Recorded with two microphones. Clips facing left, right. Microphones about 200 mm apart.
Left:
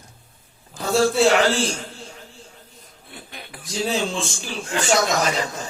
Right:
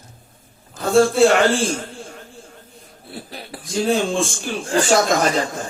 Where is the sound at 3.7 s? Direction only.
50° right (ahead or behind).